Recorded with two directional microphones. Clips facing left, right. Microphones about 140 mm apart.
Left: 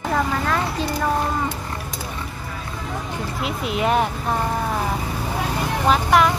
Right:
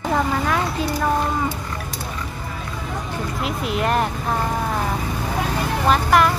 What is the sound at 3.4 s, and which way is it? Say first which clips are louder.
Speech: left 1 dB; centre (ahead or behind).